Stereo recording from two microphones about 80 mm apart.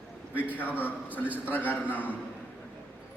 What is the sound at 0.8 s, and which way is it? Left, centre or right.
A man's voice, left.